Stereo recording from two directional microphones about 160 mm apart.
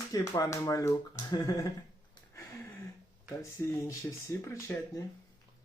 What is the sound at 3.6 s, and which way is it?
Speech, 20° left (ahead or behind).